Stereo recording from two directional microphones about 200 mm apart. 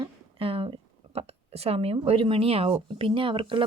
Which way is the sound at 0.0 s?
25° right (ahead or behind).